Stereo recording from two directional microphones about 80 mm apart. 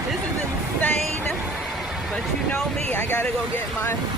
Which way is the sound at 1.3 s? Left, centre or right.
Centre.